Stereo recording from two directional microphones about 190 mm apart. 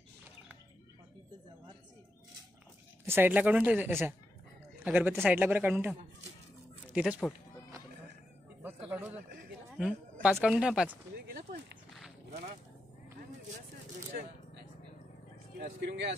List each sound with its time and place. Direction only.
3.1 s speech: 10° right (ahead or behind)
8.6 s a sound: 10° right (ahead or behind)
9.8 s speech: 5° right (ahead or behind)
14.1 s speech: 50° right (ahead or behind)
15.8 s speech: 60° right (ahead or behind)